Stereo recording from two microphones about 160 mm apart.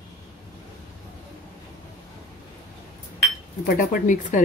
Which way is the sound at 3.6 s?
60° left (ahead or behind).